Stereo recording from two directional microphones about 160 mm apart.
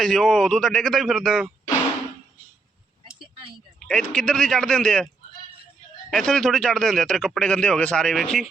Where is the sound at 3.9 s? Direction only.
5° left (ahead or behind).